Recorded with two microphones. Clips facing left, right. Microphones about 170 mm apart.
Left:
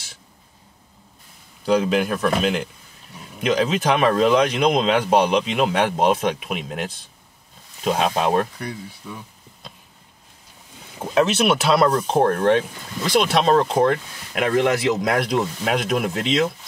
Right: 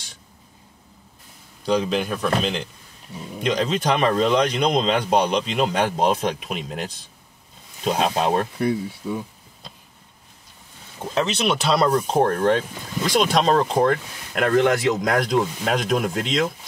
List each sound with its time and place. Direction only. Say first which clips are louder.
1.7 s speech: left 3 dB; 5° left (ahead or behind)
8.5 s speech: right 9 dB; 25° right (ahead or behind)
11.0 s speech: left 5 dB; 5° left (ahead or behind)